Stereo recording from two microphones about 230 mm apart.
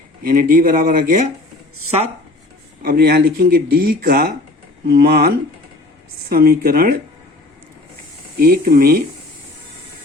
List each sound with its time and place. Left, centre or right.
0.2 s speech: right
2.8 s speech: right
8.4 s speech: right